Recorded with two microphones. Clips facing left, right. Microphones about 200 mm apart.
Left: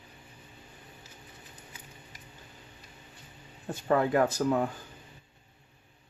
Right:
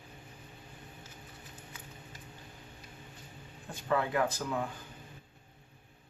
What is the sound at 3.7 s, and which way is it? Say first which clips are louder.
Speech: left 5 dB; 45° left (ahead or behind).